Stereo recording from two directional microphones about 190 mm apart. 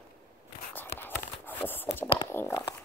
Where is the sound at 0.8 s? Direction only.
10° left (ahead or behind).